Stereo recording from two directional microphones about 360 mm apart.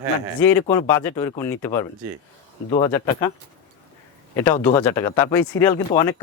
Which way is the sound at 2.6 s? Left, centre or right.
Centre.